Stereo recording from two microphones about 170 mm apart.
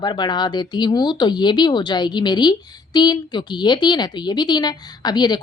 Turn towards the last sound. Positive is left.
turn(degrees=25)  # may be behind; listen again after turning